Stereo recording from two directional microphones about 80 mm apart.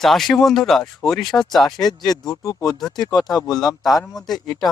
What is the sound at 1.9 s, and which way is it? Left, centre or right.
Speech, left.